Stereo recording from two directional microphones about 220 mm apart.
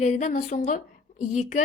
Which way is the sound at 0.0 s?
30° left (ahead or behind).